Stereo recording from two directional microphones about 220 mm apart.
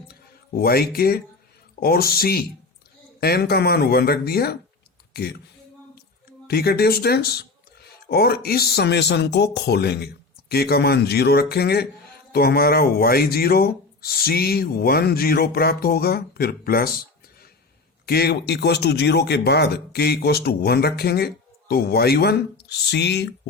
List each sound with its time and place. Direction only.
0.1 s speech: 45° left (ahead or behind)
6.5 s speech: 45° left (ahead or behind)
18.0 s speech: 45° left (ahead or behind)